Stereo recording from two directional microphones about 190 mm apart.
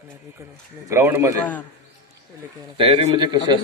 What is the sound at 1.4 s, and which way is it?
Speech, 10° left (ahead or behind).